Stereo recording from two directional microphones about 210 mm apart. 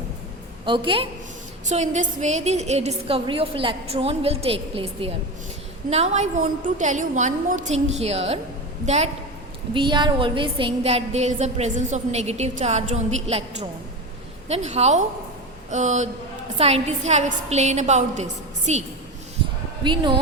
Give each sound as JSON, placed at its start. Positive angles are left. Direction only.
{"t": 0.6, "sound": "a woman's voice", "side_deg": -25}
{"t": 1.7, "sound": "a woman's voice", "side_deg": -35}
{"t": 9.7, "sound": "a woman's voice", "side_deg": -20}
{"t": 19.8, "sound": "a woman's voice", "side_deg": -20}